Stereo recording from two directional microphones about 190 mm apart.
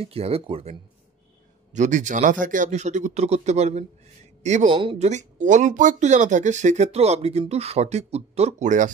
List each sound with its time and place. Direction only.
0.0 s speech: 30° right (ahead or behind)